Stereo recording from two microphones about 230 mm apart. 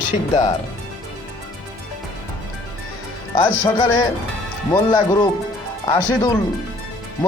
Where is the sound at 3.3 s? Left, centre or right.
Left.